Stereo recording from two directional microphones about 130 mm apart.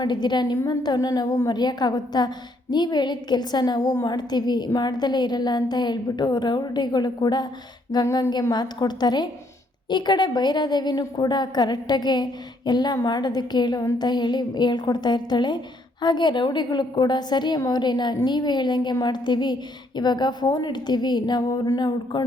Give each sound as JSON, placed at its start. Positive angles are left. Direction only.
{"t": 0.0, "sound": "a woman's voice", "side_deg": 35}